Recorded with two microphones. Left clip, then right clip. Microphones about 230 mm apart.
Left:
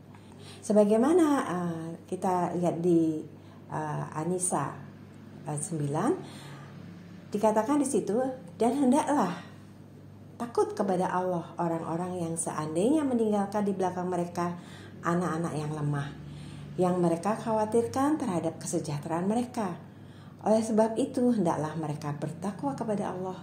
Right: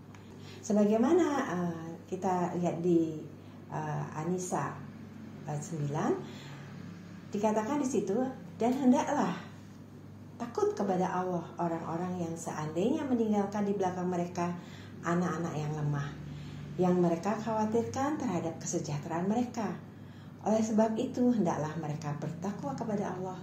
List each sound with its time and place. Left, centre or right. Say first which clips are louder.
0.7 s a woman's voice: left 5 dB; left
7.3 s a woman's voice: left 5 dB; left
10.4 s a woman's voice: left 3 dB; left